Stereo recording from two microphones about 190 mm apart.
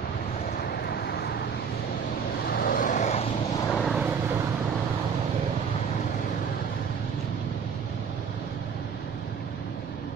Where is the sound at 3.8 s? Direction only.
5° right (ahead or behind).